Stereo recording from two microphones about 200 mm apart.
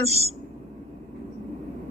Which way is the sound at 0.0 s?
30° right (ahead or behind).